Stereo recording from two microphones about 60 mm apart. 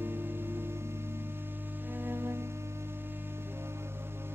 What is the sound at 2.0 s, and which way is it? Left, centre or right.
Music, right.